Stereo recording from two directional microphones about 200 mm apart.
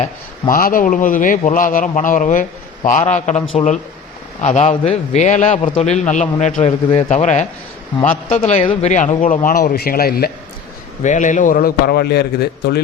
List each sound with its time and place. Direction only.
0.0 s a man's voice: 45° left (ahead or behind)
11.0 s a man's voice: 40° left (ahead or behind); by 12.8 s 55° left (ahead or behind)